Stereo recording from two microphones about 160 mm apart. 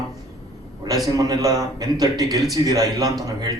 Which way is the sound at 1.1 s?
25° right (ahead or behind).